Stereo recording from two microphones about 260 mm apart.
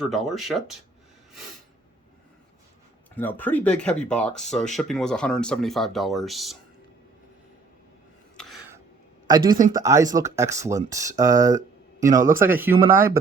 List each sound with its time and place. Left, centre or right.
0.0 s speech: centre
3.2 s speech: centre
8.4 s a sound: centre
9.2 s speech: centre